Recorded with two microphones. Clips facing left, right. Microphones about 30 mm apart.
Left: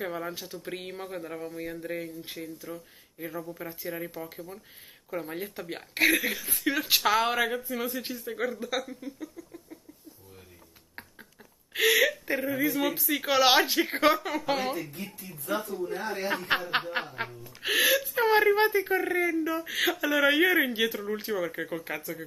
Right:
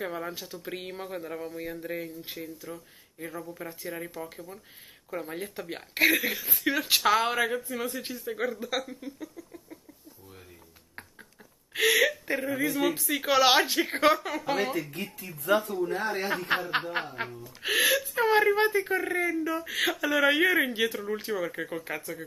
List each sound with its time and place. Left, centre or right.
0.0 s speech: centre
11.7 s speech: centre
15.4 s speech: right
15.7 s speech: right
16.5 s snicker: left
16.9 s speech: centre